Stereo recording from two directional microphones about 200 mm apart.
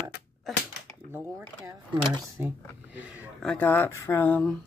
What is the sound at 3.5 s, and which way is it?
Speech, 10° left (ahead or behind).